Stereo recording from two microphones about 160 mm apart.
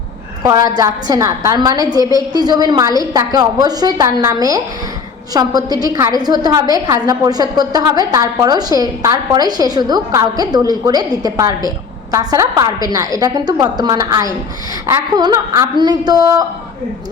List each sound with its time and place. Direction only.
0.8 s a woman's voice: 20° right (ahead or behind)